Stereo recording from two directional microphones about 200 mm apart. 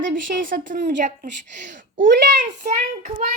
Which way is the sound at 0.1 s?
55° right (ahead or behind).